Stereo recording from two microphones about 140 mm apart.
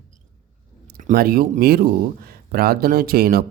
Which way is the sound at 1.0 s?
80° right.